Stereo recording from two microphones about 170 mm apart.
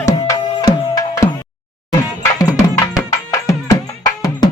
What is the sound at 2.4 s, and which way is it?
Music, 20° left (ahead or behind).